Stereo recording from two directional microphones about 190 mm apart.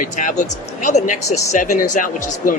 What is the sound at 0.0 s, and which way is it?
Speech, 40° left (ahead or behind).